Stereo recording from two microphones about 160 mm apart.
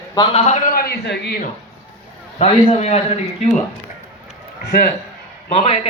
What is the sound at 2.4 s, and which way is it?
Speech, 40° left (ahead or behind).